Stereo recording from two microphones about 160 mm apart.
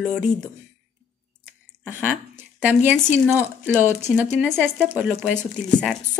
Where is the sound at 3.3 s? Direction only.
10° right (ahead or behind).